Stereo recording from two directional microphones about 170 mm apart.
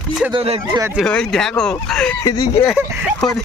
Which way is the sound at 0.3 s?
35° right (ahead or behind).